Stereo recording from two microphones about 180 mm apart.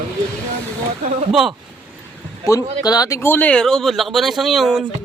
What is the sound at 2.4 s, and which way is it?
Speech, 20° left (ahead or behind).